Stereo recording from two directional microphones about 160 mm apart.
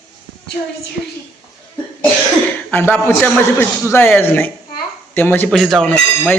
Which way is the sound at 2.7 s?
10° left (ahead or behind).